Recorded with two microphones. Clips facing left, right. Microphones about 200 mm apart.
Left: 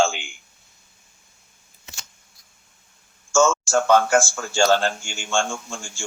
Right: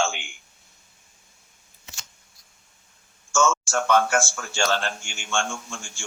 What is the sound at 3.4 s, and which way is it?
A man's voice, 30° left (ahead or behind).